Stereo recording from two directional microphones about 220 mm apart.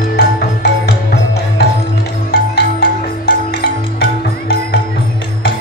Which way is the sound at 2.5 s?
45° left (ahead or behind).